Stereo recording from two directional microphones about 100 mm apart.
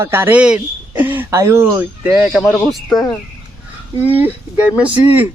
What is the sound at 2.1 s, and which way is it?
Speech, 10° right (ahead or behind).